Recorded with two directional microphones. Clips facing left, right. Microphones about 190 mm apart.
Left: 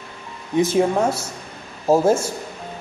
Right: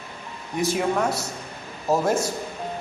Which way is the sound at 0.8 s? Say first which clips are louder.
Left 3 dB; 30° left (ahead or behind).